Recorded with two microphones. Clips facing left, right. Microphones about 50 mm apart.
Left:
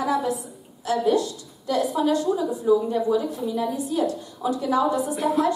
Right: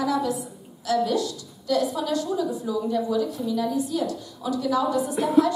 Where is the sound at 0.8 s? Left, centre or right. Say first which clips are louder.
Left 2 dB; left.